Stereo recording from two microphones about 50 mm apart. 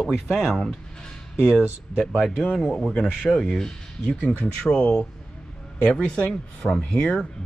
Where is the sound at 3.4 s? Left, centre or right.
Centre.